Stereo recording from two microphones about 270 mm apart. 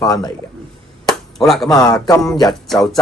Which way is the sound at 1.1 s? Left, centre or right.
Centre.